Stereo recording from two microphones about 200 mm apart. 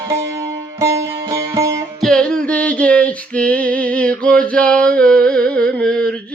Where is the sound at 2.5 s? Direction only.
5° left (ahead or behind).